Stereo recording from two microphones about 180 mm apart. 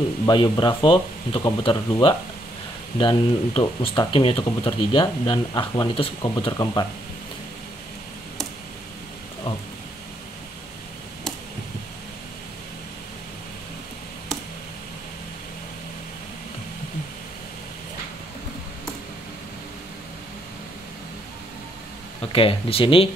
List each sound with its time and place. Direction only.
0.3 s speech: 25° left (ahead or behind)
22.3 s speech: 30° left (ahead or behind)